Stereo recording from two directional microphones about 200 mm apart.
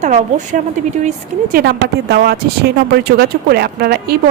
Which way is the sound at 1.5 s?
55° right (ahead or behind).